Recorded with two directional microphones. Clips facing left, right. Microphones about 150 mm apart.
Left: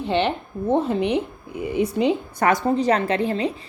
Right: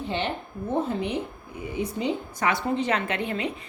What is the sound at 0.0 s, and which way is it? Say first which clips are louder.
A woman's voice: left 7 dB; 75° left (ahead or behind).